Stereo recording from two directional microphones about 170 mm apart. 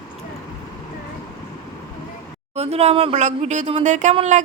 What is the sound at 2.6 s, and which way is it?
Speech, 40° right (ahead or behind).